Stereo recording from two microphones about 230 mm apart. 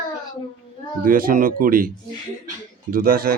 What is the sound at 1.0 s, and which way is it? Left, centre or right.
Speech, right.